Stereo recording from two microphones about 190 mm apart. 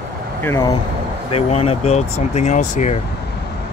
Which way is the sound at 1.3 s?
30° left (ahead or behind).